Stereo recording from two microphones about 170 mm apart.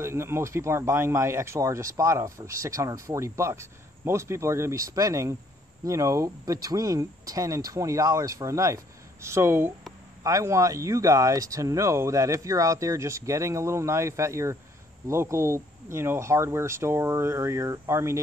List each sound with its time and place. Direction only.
0.0 s speech: 15° right (ahead or behind)